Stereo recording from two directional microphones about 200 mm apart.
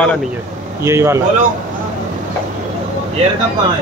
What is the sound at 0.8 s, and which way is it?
Speech, 15° right (ahead or behind).